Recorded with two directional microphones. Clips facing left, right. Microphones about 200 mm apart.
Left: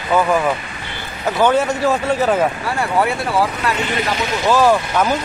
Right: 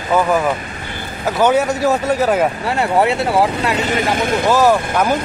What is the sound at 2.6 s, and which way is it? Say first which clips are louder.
Speech: right 3 dB; 25° right (ahead or behind).